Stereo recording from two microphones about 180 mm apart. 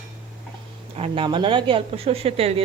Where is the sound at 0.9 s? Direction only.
30° right (ahead or behind).